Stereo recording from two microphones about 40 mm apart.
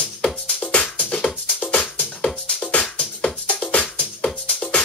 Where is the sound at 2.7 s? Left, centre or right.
Left.